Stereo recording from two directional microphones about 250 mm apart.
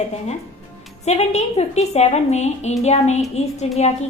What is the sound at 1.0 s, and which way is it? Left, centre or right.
A woman's voice, left.